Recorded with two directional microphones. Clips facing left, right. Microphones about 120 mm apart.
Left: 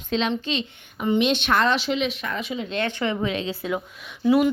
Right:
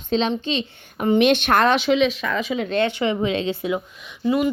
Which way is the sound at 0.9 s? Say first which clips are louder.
Right 4 dB; 55° right (ahead or behind).